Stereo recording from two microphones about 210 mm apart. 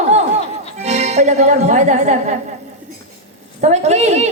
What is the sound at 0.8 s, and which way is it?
Speech, 30° right (ahead or behind).